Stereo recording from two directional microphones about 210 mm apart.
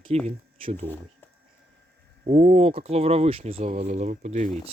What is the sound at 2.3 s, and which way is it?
Speech, 35° right (ahead or behind).